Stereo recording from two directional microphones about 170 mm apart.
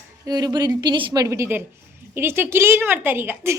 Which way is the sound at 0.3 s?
25° right (ahead or behind).